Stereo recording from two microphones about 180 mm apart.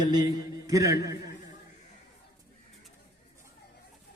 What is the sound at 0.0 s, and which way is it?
A man's voice, 20° right (ahead or behind).